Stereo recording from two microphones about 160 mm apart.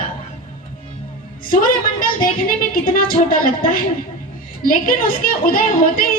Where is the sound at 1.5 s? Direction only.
60° left (ahead or behind).